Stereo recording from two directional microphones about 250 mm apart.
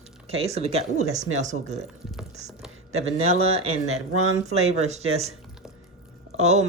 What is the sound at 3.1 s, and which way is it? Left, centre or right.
Speech, right.